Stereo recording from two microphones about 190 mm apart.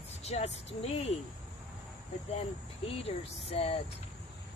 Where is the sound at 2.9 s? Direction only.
30° left (ahead or behind).